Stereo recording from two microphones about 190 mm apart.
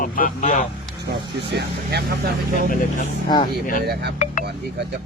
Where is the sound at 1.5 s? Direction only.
55° right (ahead or behind).